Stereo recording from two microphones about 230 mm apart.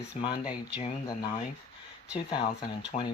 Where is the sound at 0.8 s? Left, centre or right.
Centre.